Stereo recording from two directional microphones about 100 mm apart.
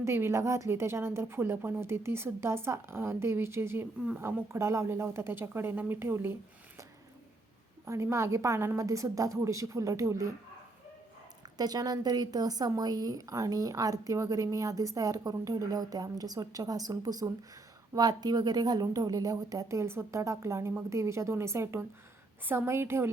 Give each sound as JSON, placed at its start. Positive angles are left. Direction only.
{"t": 0.0, "sound": "a woman's voice", "side_deg": -25}
{"t": 7.9, "sound": "a woman's voice", "side_deg": -30}
{"t": 11.4, "sound": "a woman's voice", "side_deg": -40}